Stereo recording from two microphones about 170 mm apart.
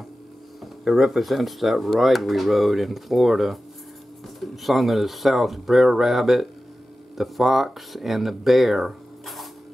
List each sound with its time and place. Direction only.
0.8 s speech: centre (ahead or behind)